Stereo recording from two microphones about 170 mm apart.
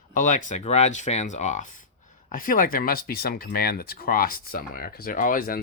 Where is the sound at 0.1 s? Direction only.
50° left (ahead or behind).